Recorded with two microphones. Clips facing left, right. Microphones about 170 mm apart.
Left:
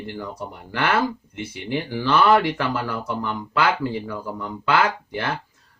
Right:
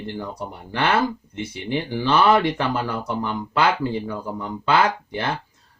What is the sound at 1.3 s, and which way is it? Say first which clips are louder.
Speech: right 1 dB; 15° left (ahead or behind).